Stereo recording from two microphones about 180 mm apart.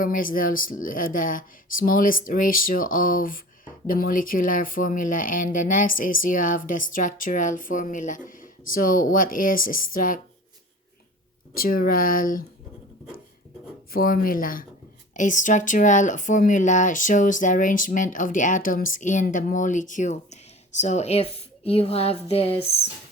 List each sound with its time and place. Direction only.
0.0 s speech: 50° left (ahead or behind)
11.5 s speech: 50° left (ahead or behind)
13.9 s a woman's voice: 55° left (ahead or behind); by 22.8 s 35° left (ahead or behind)